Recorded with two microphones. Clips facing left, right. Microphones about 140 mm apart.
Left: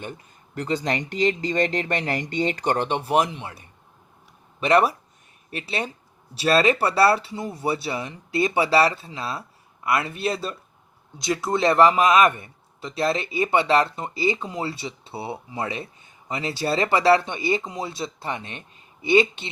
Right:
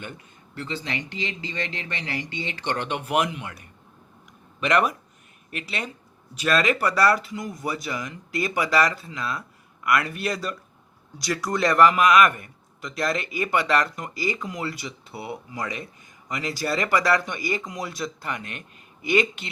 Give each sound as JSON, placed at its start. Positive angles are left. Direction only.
{"t": 0.5, "sound": "speech", "side_deg": 45}